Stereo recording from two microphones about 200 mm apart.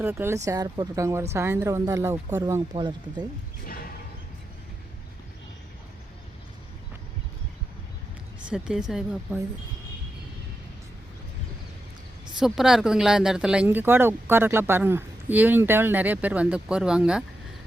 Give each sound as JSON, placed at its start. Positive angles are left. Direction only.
{"t": 0.0, "sound": "speech", "side_deg": -10}
{"t": 8.4, "sound": "speech", "side_deg": -5}
{"t": 12.4, "sound": "speech", "side_deg": 0}